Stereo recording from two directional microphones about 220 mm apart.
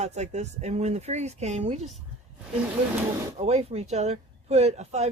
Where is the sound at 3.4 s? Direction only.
30° right (ahead or behind).